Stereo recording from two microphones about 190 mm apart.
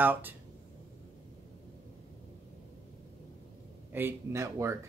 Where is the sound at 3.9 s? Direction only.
10° right (ahead or behind).